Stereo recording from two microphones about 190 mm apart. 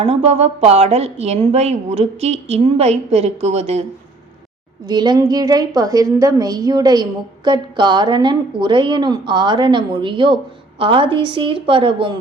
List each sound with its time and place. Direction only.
0.0 s a woman's voice: 35° right (ahead or behind)
4.9 s a woman's voice: 20° right (ahead or behind)